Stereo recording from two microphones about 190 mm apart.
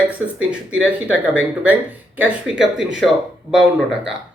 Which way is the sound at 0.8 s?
5° right (ahead or behind).